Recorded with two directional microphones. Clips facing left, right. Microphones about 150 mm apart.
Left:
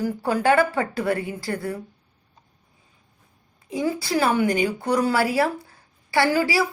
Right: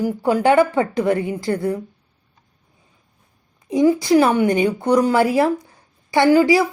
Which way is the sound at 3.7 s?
20° right (ahead or behind).